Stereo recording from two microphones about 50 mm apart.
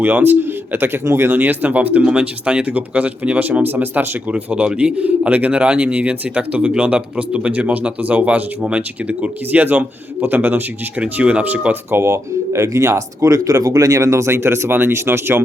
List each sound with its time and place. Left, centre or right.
0.0 s speech: right
1.0 s speech: right
2.0 s speech: centre
4.9 s speech: right
11.0 s speech: right
12.0 s speech: right